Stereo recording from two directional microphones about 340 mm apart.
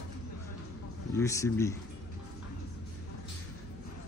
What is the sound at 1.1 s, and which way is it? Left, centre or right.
Speech, centre.